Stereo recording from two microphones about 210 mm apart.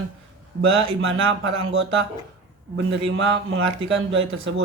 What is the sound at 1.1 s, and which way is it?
A man's voice, 70° right (ahead or behind).